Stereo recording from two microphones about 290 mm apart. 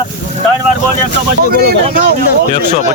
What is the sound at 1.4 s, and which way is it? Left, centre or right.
Speech, right.